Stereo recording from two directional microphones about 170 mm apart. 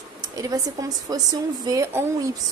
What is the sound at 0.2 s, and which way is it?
A woman's voice, 20° right (ahead or behind).